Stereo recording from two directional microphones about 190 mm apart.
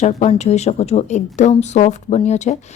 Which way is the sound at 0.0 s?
35° left (ahead or behind).